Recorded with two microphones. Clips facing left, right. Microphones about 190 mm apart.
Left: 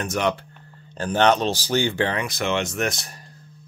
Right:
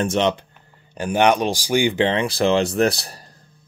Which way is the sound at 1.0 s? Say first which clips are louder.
Right 2 dB; 10° right (ahead or behind).